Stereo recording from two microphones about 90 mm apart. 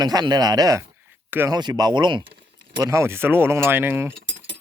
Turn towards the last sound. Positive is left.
turn(degrees=-25)  # may be behind; listen again after turning